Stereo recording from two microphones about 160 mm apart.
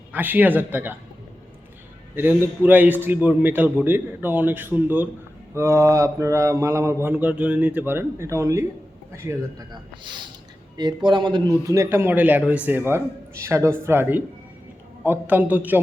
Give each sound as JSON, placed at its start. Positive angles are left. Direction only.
{"t": 0.1, "sound": "mantra", "side_deg": -10}
{"t": 2.1, "sound": "mantra", "side_deg": -10}
{"t": 10.0, "sound": "speech", "side_deg": -30}
{"t": 11.6, "sound": "mantra", "side_deg": -20}